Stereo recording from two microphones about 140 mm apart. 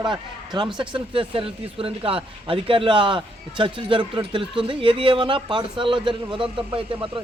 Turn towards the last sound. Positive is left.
turn(degrees=-40)  # may be behind; listen again after turning